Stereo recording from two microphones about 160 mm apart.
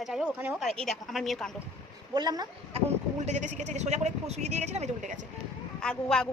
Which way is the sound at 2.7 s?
40° right (ahead or behind).